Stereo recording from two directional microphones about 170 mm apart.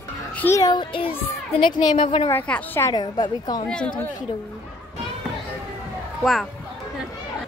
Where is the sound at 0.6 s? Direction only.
25° left (ahead or behind).